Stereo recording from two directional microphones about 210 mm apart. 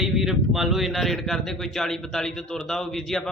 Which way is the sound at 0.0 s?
Centre (ahead or behind).